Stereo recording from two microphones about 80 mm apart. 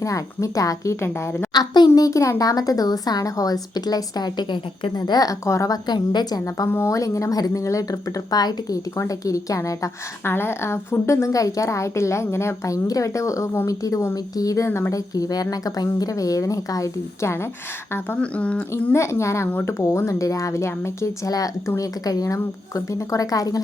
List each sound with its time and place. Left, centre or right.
0.0 s speech: left
1.0 s a woman's voice: left
1.5 s a woman's voice: left
2.0 s speech: left
6.7 s a woman's voice: left
6.9 s speech: left
10.2 s a woman's voice: left
18.2 s speech: centre
18.9 s a woman's voice: left
21.2 s speech: left